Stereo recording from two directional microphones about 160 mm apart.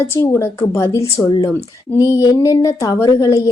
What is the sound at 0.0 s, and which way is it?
A woman's voice, 15° left (ahead or behind).